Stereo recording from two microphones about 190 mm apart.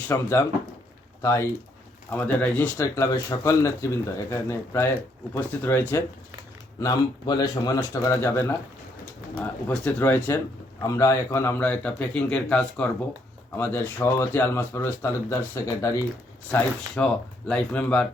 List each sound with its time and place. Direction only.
0.1 s speech: 10° left (ahead or behind)